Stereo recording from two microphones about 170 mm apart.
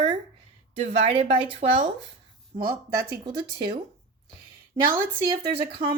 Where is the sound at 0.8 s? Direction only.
50° right (ahead or behind).